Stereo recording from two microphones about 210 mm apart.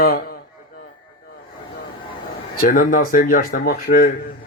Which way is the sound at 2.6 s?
40° left (ahead or behind).